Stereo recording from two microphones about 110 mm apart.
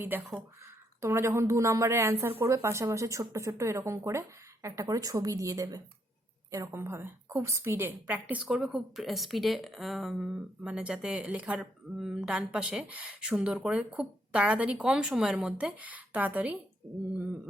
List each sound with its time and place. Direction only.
0.1 s a woman's voice: 20° right (ahead or behind)